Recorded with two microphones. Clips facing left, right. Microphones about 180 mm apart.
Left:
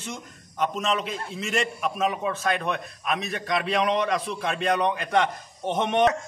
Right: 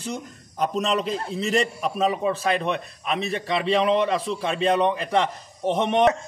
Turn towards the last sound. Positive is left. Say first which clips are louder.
# right 2 dB
turn(degrees=-30)  # may be behind; listen again after turning